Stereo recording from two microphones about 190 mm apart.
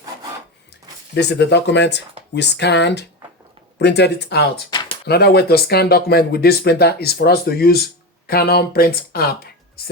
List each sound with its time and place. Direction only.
1.1 s speech: 60° left (ahead or behind)
4.7 s a sound: 20° left (ahead or behind)
5.0 s speech: 55° left (ahead or behind)